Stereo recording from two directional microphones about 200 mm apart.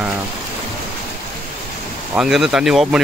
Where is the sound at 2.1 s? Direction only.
Centre (ahead or behind).